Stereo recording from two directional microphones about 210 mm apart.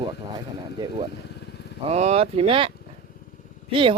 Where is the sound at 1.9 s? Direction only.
30° right (ahead or behind).